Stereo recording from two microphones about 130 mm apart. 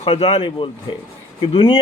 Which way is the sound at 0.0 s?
45° left (ahead or behind).